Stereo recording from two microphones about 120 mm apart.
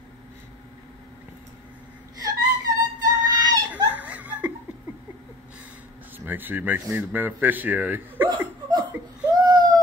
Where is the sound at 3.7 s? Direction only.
15° right (ahead or behind).